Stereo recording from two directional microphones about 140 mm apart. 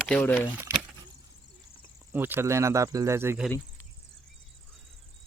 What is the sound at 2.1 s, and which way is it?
Speech, 15° right (ahead or behind).